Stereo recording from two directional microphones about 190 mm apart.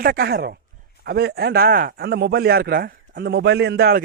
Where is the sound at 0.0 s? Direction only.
55° right (ahead or behind).